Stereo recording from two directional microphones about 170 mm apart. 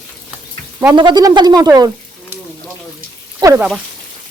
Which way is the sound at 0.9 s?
25° right (ahead or behind).